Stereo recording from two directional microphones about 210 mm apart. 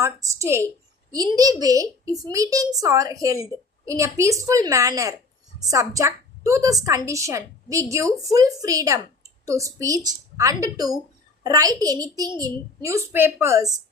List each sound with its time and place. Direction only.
0.0 s a woman's voice: 15° right (ahead or behind)